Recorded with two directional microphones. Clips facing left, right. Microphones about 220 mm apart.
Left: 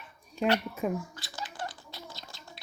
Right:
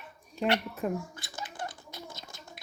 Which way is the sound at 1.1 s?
20° right (ahead or behind).